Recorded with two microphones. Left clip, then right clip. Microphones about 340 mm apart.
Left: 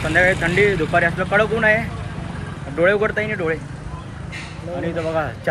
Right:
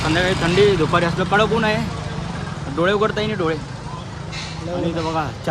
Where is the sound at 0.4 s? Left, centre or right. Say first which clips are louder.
Right 2 dB; centre.